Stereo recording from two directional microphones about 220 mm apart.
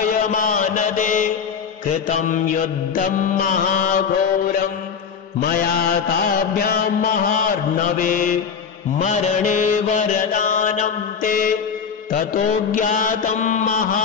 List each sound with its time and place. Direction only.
0.3 s mantra: 35° left (ahead or behind)
5.4 s mantra: 40° left (ahead or behind)